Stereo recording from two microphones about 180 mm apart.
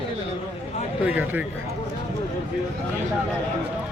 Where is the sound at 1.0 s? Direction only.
10° right (ahead or behind).